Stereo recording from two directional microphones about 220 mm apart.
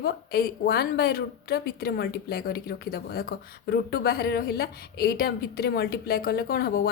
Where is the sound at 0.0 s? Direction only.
45° left (ahead or behind).